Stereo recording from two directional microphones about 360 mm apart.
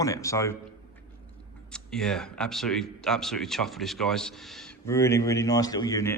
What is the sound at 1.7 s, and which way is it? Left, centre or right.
A man's voice, centre.